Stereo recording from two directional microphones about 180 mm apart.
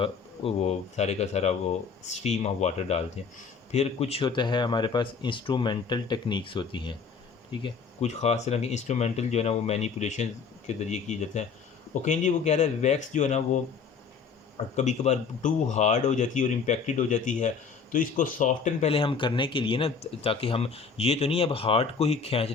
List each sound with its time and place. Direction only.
0.0 s speech: 35° left (ahead or behind)
8.0 s speech: 35° left (ahead or behind)
14.8 s speech: 40° left (ahead or behind)